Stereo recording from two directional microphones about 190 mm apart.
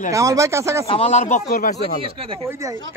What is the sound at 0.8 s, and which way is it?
Speech, 30° left (ahead or behind).